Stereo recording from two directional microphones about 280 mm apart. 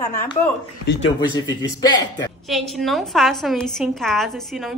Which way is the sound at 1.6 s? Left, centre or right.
Centre.